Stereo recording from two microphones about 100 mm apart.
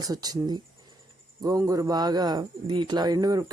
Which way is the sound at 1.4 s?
35° right (ahead or behind).